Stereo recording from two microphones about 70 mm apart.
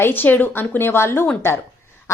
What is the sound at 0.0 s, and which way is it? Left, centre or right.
A woman's voice, left.